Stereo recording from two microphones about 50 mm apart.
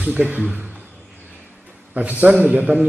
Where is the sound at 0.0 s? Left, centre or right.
Right.